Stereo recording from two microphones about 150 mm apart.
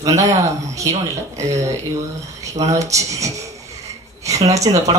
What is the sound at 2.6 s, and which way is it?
Speech, 20° right (ahead or behind).